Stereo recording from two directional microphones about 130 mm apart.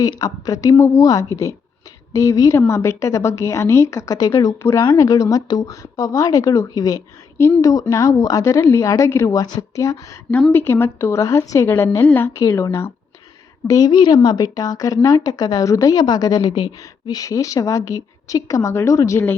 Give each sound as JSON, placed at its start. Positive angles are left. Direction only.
{"t": 0.0, "sound": "a woman's voice", "side_deg": 30}